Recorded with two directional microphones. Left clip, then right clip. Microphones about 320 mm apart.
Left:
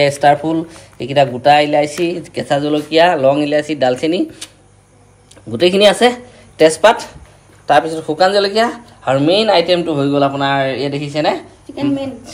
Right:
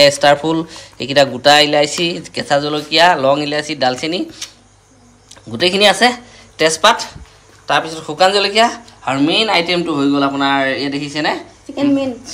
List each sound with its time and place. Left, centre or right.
0.0 s speech: centre
5.5 s speech: centre
11.7 s a woman's voice: right